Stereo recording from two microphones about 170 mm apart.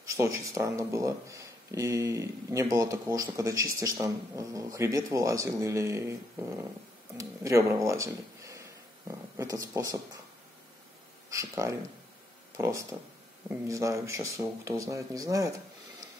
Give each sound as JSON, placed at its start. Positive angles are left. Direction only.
{"t": 0.1, "sound": "speech", "side_deg": -20}
{"t": 7.2, "sound": "speech", "side_deg": -15}
{"t": 11.2, "sound": "speech", "side_deg": -20}